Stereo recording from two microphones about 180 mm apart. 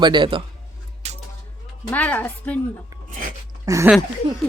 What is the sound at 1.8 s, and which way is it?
Speech, 10° left (ahead or behind).